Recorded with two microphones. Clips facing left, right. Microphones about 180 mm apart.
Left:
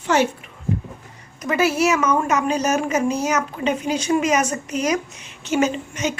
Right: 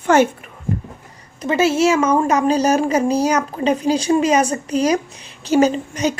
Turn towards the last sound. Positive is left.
turn(degrees=-35)  # may be behind; listen again after turning